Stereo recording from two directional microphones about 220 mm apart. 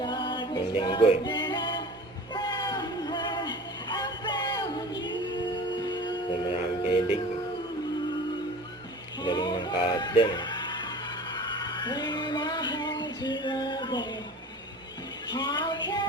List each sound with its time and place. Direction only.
0.0 s music: 20° left (ahead or behind)
5.8 s music: 20° left (ahead or behind)
9.2 s music: 20° left (ahead or behind)
15.3 s music: 20° left (ahead or behind)